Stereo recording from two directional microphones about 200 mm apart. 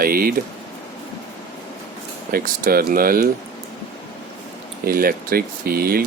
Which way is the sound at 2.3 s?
45° right (ahead or behind).